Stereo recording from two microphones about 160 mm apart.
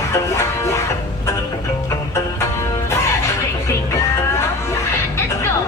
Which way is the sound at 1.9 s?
15° left (ahead or behind).